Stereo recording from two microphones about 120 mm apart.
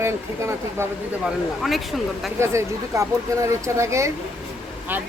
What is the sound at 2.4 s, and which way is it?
Speech, 25° right (ahead or behind).